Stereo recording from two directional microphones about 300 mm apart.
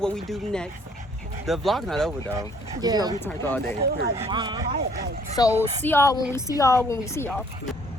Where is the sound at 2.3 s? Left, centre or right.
Centre.